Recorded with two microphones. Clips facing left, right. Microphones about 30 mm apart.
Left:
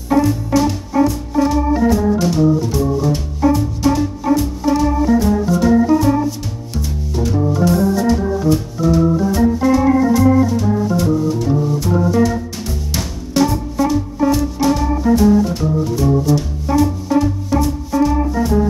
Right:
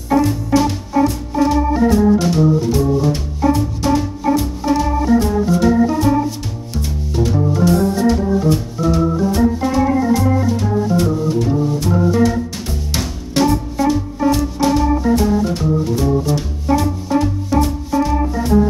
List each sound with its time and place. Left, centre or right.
0.1 s music: centre
1.0 s music: centre
1.3 s organ: centre
7.2 s organ: centre
10.5 s music: centre
13.7 s music: centre